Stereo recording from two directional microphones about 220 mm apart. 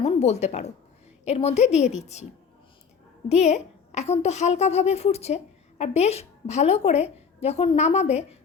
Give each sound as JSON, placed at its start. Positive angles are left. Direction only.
{"t": 0.0, "sound": "a woman's voice", "side_deg": 30}
{"t": 3.2, "sound": "a woman's voice", "side_deg": 30}